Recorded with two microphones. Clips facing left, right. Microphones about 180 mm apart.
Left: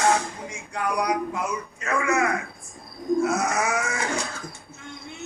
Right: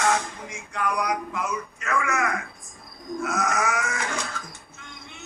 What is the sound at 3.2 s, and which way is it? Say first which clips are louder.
Grunt: left 2 dB; 30° left (ahead or behind).